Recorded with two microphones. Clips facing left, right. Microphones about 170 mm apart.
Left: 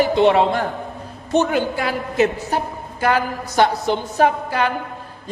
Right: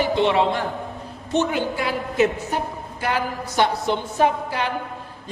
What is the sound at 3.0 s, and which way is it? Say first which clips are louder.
Speech: left 5 dB; 45° left (ahead or behind).